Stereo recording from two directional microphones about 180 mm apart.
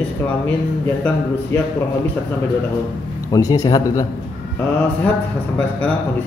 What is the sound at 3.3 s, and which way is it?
Speech, 20° left (ahead or behind).